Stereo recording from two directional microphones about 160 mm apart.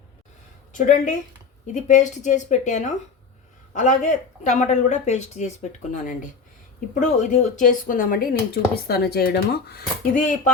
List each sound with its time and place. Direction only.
0.7 s speech: 50° left (ahead or behind)
8.7 s speech: 80° left; by 10.5 s 55° left (ahead or behind)